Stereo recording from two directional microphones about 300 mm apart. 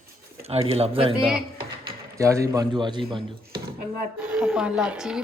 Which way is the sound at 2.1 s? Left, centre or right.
Centre.